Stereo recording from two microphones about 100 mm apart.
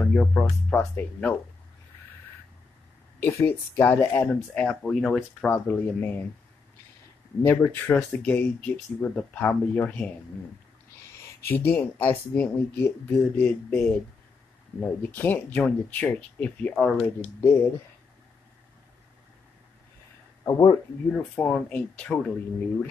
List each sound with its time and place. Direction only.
0.0 s speech: 15° left (ahead or behind)
3.2 s speech: 30° left (ahead or behind)
4.6 s speech: 5° left (ahead or behind)
5.5 s speech: 20° left (ahead or behind)
7.4 s speech: 20° left (ahead or behind)
11.4 s speech: 20° left (ahead or behind)
20.4 s speech: 40° left (ahead or behind)
21.1 s speech: 15° left (ahead or behind)